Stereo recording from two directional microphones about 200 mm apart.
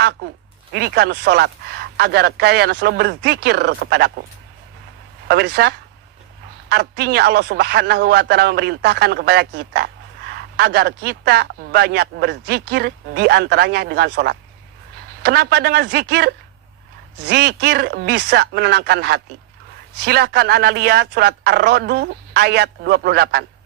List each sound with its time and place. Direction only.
0.2 s a man's voice: 50° right (ahead or behind)
5.3 s a man's voice: 55° right (ahead or behind)